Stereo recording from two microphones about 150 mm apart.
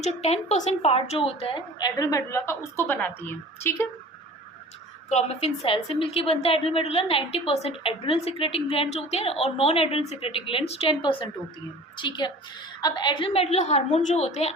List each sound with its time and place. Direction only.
0.0 s a woman's voice: 45° left (ahead or behind); by 3.8 s 15° left (ahead or behind)
5.0 s a woman's voice: 45° left (ahead or behind)